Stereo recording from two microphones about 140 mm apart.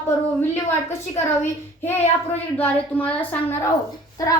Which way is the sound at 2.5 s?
10° left (ahead or behind).